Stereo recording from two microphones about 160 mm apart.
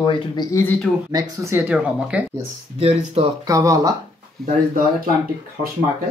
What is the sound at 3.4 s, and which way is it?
Speech, 20° right (ahead or behind).